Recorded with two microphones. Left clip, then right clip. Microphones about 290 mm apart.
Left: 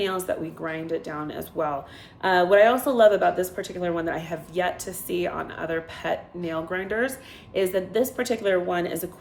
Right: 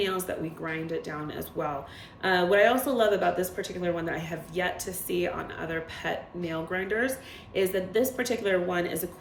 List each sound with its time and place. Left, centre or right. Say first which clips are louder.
0.0 s speech: left 3 dB; centre